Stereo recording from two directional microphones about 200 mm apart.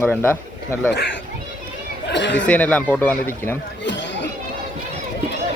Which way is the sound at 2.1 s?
60° left (ahead or behind).